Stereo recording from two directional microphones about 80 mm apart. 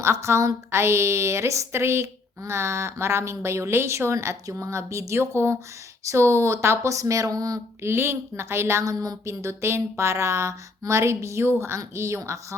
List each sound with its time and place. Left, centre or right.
0.0 s a woman's voice: right
7.8 s a woman's voice: right